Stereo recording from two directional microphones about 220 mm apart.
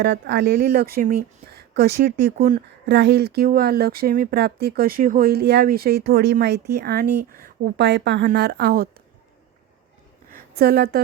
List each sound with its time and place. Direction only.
0.0 s speech: 50° right (ahead or behind)
10.3 s a woman's voice: 45° right (ahead or behind)